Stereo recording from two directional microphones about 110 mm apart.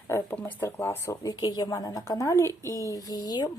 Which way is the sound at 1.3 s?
40° left (ahead or behind).